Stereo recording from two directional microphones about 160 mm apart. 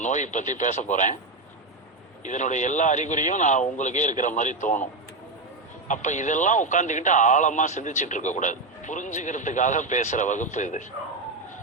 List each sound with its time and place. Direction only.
0.0 s speech: 50° left (ahead or behind)
2.2 s speech: 50° left (ahead or behind)
5.9 s speech: 50° left (ahead or behind)